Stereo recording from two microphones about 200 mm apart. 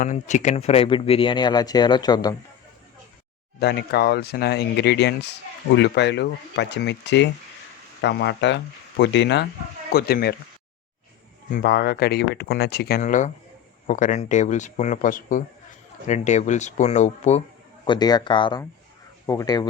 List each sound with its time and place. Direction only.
0.0 s speech: 40° left (ahead or behind); by 2.3 s 20° left (ahead or behind)
3.6 s speech: 55° left (ahead or behind)
11.5 s speech: 55° left (ahead or behind); by 17.4 s 35° left (ahead or behind)
17.8 s speech: 20° left (ahead or behind)